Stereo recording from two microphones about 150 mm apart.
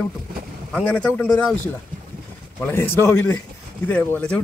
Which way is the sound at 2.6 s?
15° left (ahead or behind).